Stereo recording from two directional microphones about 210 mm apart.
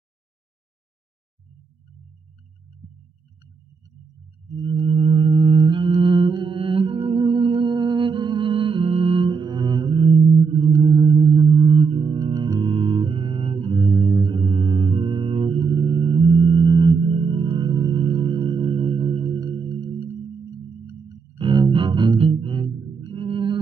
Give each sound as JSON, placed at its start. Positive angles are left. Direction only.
{"t": 4.6, "sound": "music", "side_deg": -25}
{"t": 10.6, "sound": "sine wave", "side_deg": -20}
{"t": 11.6, "sound": "music", "side_deg": -25}
{"t": 21.4, "sound": "music", "side_deg": -20}